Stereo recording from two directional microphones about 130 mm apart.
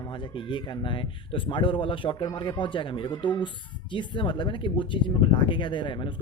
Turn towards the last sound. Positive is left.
turn(degrees=40)  # may be behind; listen again after turning